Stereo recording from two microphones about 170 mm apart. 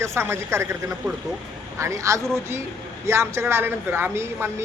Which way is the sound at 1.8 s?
15° right (ahead or behind).